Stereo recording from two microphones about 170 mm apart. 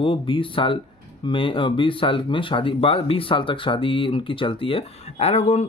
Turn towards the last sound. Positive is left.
turn(degrees=40)  # may be behind; listen again after turning